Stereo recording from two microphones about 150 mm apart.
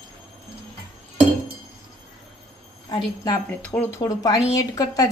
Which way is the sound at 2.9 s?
25° left (ahead or behind).